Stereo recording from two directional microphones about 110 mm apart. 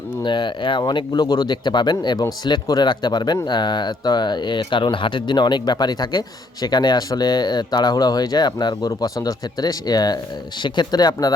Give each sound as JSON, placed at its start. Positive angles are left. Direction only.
{"t": 0.2, "sound": "speech", "side_deg": 45}